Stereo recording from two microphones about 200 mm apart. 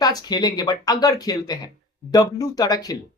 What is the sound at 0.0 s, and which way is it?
Speech, 20° left (ahead or behind).